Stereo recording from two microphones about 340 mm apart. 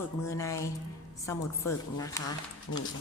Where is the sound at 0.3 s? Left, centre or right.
Centre.